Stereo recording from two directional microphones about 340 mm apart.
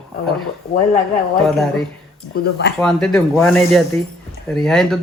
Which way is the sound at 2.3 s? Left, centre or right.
Left.